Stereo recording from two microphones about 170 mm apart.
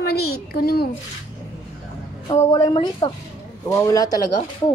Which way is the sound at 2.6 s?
25° left (ahead or behind).